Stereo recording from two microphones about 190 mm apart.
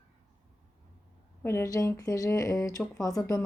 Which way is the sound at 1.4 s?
15° left (ahead or behind).